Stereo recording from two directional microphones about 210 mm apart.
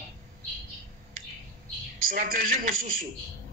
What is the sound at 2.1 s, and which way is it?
Speech, 40° right (ahead or behind).